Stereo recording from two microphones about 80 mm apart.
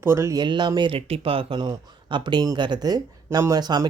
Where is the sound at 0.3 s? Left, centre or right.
Right.